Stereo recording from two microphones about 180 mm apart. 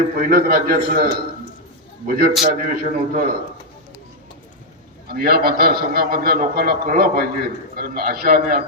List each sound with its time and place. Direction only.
0.2 s a man's voice: 60° right (ahead or behind)
5.1 s a man's voice: 60° right (ahead or behind)